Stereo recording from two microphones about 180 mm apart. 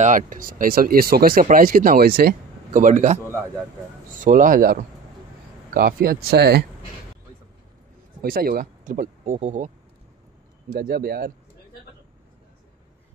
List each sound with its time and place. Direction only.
0.0 s speech: 45° right (ahead or behind); by 6.6 s 60° right (ahead or behind)
8.2 s speech: 55° right (ahead or behind)
10.8 s speech: 55° right (ahead or behind)